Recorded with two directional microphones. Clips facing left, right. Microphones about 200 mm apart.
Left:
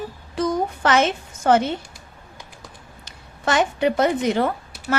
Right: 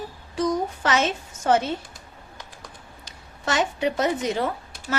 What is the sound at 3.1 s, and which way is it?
A woman's voice, 55° left (ahead or behind).